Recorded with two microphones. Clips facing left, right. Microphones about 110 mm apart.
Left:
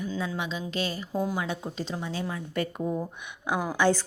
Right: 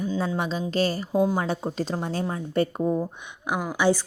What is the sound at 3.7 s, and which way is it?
Speech, 15° right (ahead or behind).